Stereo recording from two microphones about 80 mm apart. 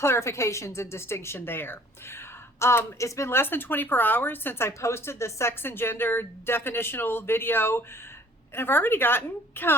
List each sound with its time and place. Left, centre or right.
0.0 s a woman's voice: left